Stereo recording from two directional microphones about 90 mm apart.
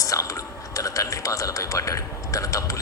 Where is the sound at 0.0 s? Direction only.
40° left (ahead or behind).